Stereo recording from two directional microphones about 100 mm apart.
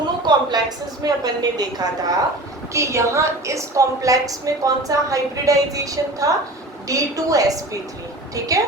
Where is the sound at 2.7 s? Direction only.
30° right (ahead or behind).